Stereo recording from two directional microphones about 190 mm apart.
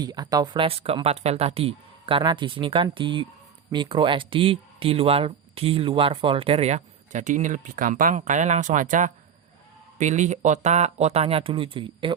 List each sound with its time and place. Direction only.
0.0 s speech: 20° right (ahead or behind)